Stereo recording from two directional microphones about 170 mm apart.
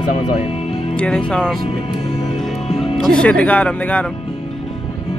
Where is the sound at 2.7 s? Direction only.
Centre (ahead or behind).